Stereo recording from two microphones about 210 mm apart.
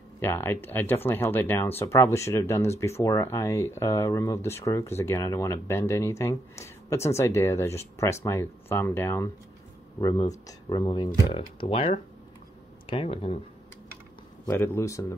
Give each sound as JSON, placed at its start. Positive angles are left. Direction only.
{"t": 0.2, "sound": "speech", "side_deg": 10}
{"t": 14.4, "sound": "speech", "side_deg": 10}